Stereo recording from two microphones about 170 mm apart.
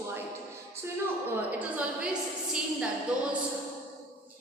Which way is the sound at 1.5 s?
10° right (ahead or behind).